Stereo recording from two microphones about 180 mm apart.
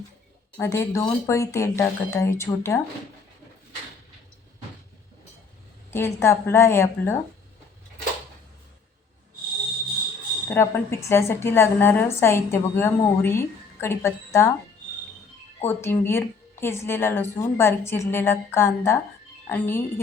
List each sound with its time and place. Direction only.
0.6 s a woman's voice: 15° left (ahead or behind)
5.9 s a woman's voice: 15° left (ahead or behind)
10.5 s a woman's voice: 15° left (ahead or behind)
15.6 s a woman's voice: 10° left (ahead or behind)